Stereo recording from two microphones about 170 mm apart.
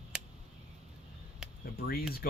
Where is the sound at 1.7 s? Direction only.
65° left (ahead or behind).